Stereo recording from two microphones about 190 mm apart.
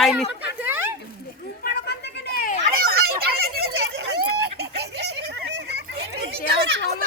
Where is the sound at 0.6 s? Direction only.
10° right (ahead or behind).